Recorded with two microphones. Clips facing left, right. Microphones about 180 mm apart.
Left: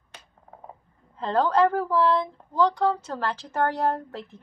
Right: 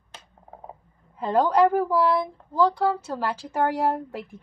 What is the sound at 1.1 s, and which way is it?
Speech, 10° right (ahead or behind).